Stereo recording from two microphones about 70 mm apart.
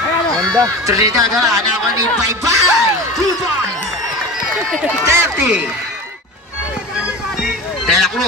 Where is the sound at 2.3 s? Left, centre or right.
Right.